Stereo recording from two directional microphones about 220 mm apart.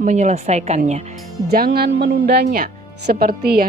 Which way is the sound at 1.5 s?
45° right (ahead or behind).